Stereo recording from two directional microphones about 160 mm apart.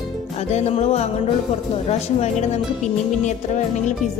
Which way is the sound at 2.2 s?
45° left (ahead or behind).